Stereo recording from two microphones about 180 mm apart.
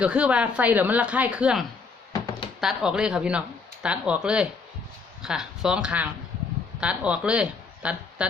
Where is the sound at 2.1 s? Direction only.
20° left (ahead or behind).